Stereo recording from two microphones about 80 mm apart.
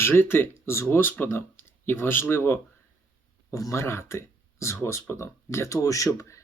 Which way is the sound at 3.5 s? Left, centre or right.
Left.